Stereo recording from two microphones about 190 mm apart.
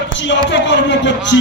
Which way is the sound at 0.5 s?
70° left (ahead or behind).